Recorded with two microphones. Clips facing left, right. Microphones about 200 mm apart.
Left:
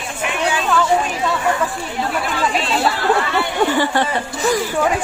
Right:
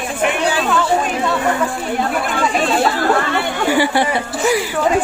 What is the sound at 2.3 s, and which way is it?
Speech, 50° right (ahead or behind).